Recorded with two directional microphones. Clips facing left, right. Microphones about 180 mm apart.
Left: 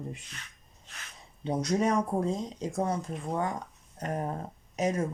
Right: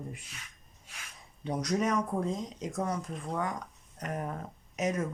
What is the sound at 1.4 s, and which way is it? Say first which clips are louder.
Speech: left 3 dB; 25° left (ahead or behind).